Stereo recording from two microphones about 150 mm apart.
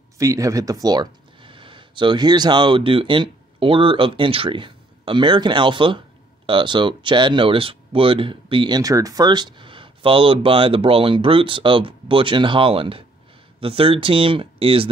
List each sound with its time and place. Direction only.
0.2 s speech: 20° right (ahead or behind); by 14.9 s 35° right (ahead or behind)